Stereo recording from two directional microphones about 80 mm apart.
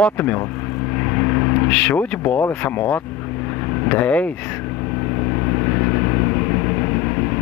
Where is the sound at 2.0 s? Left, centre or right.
Left.